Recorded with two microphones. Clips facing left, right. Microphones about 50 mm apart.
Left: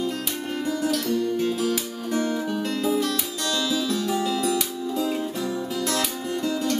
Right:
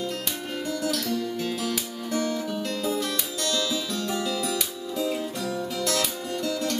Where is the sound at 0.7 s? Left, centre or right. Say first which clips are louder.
Left 3 dB; centre.